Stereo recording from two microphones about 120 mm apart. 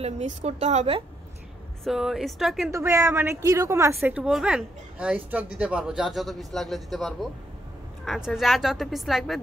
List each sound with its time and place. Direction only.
0.0 s a woman's voice: 65° right (ahead or behind)
1.9 s speech: centre (ahead or behind)
2.7 s speech: 25° right (ahead or behind)
4.2 s speech: 5° right (ahead or behind)